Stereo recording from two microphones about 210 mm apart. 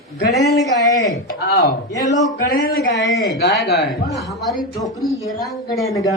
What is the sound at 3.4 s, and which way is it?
Speech, 55° left (ahead or behind).